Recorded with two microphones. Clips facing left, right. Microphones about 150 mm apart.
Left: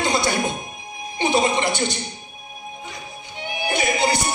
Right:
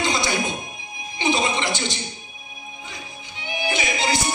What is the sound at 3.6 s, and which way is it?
Music, 50° left (ahead or behind).